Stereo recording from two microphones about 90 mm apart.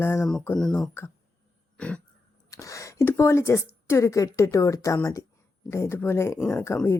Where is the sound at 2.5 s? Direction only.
35° left (ahead or behind).